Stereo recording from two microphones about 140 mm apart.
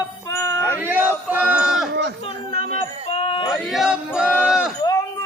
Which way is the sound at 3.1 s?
40° left (ahead or behind).